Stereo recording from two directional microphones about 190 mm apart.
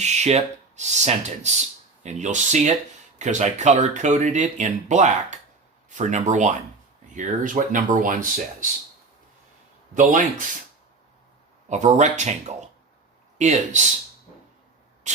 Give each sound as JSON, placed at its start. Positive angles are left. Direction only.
{"t": 0.0, "sound": "speech", "side_deg": -35}
{"t": 9.9, "sound": "speech", "side_deg": -40}
{"t": 11.7, "sound": "speech", "side_deg": -40}